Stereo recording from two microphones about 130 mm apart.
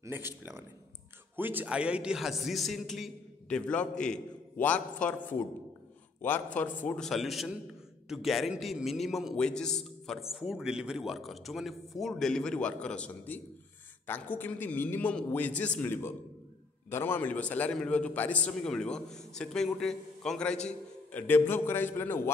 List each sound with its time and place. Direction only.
0.0 s a man's voice: 20° right (ahead or behind); by 7.1 s 15° left (ahead or behind)
7.1 s a man's voice: centre (ahead or behind); by 22.3 s 15° left (ahead or behind)